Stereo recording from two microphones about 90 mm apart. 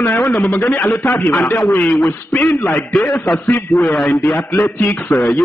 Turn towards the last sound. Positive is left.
turn(degrees=25)  # may be behind; listen again after turning